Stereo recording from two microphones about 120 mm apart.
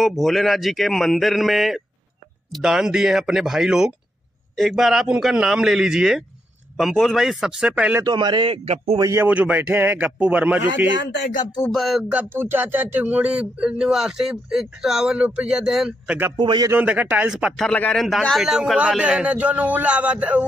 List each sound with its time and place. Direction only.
0.0 s a man's voice: centre (ahead or behind)
8.0 s a man's voice: 40° right (ahead or behind)
8.9 s speech: 30° right (ahead or behind)
9.2 s speech: 15° right (ahead or behind)
11.7 s a man's voice: centre (ahead or behind)
12.0 s speech: 10° right (ahead or behind)
16.3 s a man's voice: 40° right (ahead or behind)
16.8 s speech: 10° right (ahead or behind)
17.6 s a man's voice: 10° left (ahead or behind); by 20.4 s 10° right (ahead or behind)